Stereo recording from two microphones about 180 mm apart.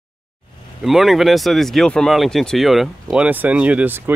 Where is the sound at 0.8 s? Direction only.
Centre (ahead or behind).